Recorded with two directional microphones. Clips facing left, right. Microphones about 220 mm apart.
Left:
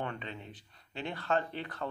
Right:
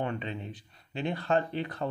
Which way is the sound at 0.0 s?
20° right (ahead or behind).